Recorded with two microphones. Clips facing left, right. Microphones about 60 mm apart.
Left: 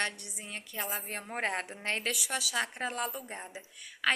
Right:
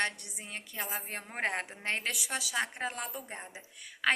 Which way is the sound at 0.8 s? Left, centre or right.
Right.